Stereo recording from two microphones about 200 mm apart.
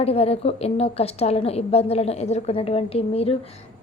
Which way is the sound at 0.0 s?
30° left (ahead or behind).